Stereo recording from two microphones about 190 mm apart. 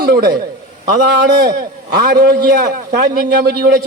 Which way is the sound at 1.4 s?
55° right (ahead or behind).